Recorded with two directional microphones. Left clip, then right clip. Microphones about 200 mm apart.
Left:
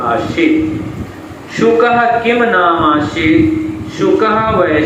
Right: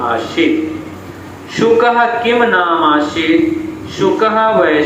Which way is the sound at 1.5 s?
45° right (ahead or behind).